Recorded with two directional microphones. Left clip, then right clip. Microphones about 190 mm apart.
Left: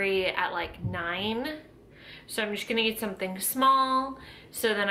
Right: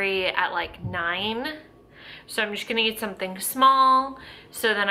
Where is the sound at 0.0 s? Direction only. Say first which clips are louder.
Right 3 dB; centre (ahead or behind).